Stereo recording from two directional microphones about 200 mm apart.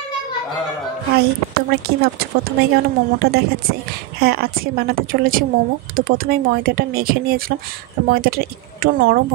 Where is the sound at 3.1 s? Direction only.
50° right (ahead or behind).